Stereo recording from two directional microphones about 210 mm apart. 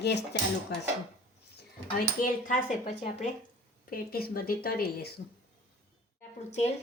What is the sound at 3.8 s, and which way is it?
Speech, 45° left (ahead or behind).